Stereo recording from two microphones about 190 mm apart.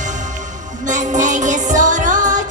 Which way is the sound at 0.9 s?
40° right (ahead or behind).